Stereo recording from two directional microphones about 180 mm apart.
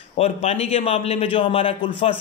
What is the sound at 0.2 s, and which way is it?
A man's voice, 35° left (ahead or behind).